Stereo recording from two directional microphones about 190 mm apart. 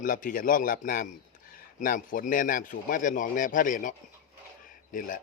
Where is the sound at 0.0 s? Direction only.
45° left (ahead or behind).